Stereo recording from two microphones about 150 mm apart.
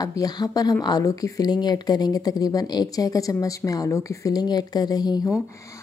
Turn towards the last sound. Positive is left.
turn(degrees=25)  # may be behind; listen again after turning